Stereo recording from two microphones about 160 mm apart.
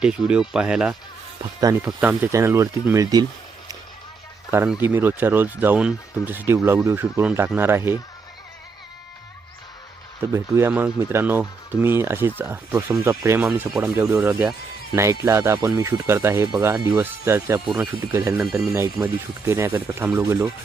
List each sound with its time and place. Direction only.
0.0 s speech: 5° right (ahead or behind)
1.4 s speech: 20° right (ahead or behind)
1.8 s speech: 10° right (ahead or behind)
4.8 s speech: 15° right (ahead or behind)
10.3 s speech: 20° right (ahead or behind)